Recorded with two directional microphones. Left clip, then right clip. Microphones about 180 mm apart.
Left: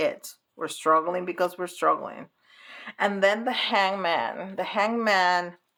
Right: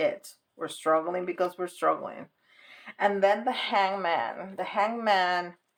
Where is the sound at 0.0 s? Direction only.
35° left (ahead or behind).